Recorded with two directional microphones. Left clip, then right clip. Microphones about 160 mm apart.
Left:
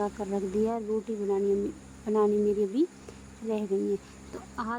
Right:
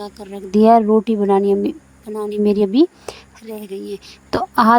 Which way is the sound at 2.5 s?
70° right (ahead or behind).